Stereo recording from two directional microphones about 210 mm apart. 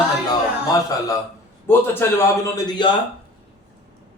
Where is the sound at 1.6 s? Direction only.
10° left (ahead or behind).